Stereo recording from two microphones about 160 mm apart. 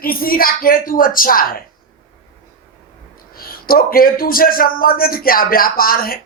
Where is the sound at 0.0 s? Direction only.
65° left (ahead or behind).